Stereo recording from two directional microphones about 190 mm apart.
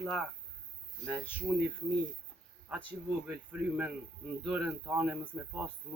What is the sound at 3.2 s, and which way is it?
Speech, 5° right (ahead or behind).